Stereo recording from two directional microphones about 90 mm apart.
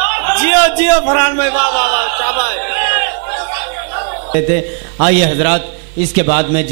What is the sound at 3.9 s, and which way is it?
A man's voice, 15° right (ahead or behind).